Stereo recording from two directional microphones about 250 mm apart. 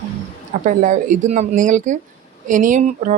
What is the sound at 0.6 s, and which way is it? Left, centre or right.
Speech, right.